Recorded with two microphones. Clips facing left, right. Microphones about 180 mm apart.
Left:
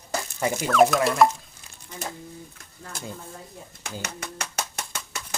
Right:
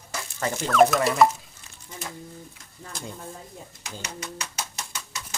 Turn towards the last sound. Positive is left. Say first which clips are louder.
# left 2 dB
turn(degrees=55)  # may be behind; listen again after turning